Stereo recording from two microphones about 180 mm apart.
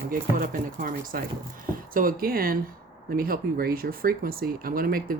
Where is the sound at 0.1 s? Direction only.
50° right (ahead or behind).